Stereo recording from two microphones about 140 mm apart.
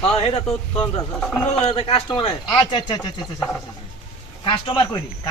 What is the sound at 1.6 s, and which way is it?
A man's voice, 45° left (ahead or behind).